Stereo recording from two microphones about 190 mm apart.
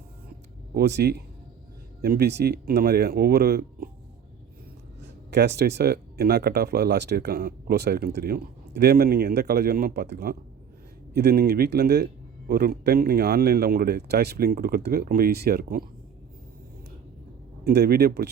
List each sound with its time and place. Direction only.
0.7 s speech: 55° right (ahead or behind)
5.3 s speech: 60° right (ahead or behind)
17.7 s speech: 60° right (ahead or behind)